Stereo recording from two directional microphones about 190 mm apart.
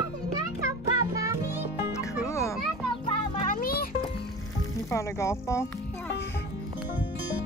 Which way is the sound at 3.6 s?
50° left (ahead or behind).